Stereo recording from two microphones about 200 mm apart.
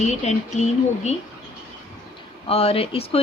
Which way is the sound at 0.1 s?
35° left (ahead or behind).